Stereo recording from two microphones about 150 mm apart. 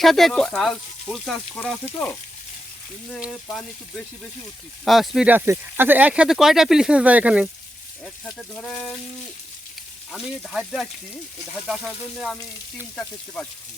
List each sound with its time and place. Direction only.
0.0 s speech: centre (ahead or behind)
3.2 s speech: 5° left (ahead or behind)
8.0 s speech: 5° left (ahead or behind)
10.1 s speech: centre (ahead or behind)